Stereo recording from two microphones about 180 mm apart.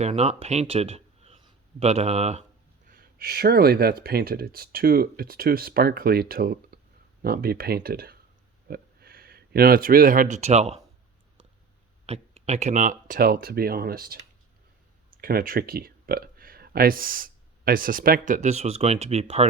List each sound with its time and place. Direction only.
0.0 s speech: 40° right (ahead or behind)
2.8 s speech: 50° right (ahead or behind)
12.0 s speech: 35° right (ahead or behind); by 14.2 s 55° right (ahead or behind)
15.2 s speech: 55° right (ahead or behind); by 19.5 s 35° right (ahead or behind)